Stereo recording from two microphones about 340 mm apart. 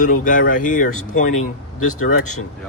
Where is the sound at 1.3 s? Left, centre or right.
Left.